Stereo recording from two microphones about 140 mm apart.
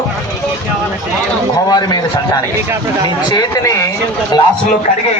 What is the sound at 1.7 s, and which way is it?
Speech, 30° left (ahead or behind).